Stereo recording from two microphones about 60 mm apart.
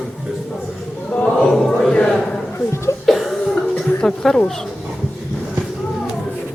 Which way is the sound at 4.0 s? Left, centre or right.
Centre.